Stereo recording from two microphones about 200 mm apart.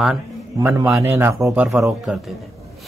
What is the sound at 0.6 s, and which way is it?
A man's voice, 15° right (ahead or behind).